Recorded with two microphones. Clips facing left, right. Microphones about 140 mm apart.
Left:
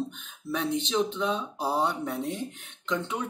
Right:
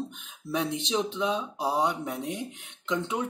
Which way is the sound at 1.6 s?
Centre (ahead or behind).